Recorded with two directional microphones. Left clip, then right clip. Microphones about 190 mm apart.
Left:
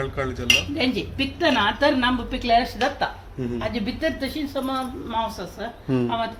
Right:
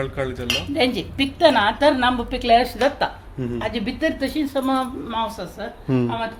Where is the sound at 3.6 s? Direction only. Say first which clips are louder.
Right 3 dB; 45° right (ahead or behind).